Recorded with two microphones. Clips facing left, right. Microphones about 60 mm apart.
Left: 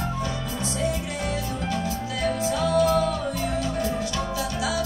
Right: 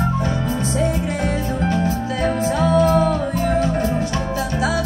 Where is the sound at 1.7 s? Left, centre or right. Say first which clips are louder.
Right 7 dB; right.